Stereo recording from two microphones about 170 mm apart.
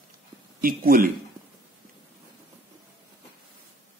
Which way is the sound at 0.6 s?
55° right (ahead or behind).